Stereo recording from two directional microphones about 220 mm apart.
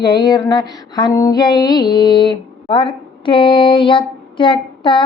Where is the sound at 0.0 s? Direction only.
20° left (ahead or behind).